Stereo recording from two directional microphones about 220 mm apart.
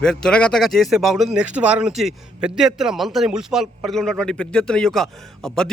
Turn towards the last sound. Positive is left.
turn(degrees=0)  # may be behind; listen again after turning